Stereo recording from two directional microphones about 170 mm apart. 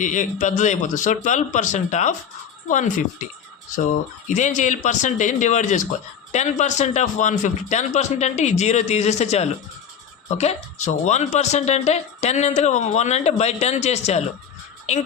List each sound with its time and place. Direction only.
0.0 s speech: 50° left (ahead or behind)